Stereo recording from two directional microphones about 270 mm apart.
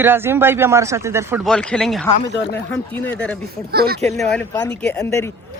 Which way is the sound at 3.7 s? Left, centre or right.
Right.